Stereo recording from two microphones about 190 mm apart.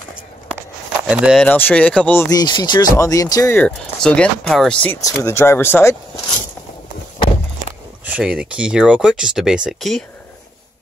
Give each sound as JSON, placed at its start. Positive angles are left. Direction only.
{"t": 1.0, "sound": "speech", "side_deg": -5}
{"t": 1.4, "sound": "speech", "side_deg": 10}
{"t": 2.2, "sound": "speech", "side_deg": 20}
{"t": 5.0, "sound": "speech", "side_deg": 15}
{"t": 8.0, "sound": "speech", "side_deg": -5}